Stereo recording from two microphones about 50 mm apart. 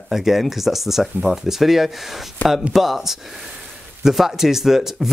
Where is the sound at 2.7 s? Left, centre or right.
Centre.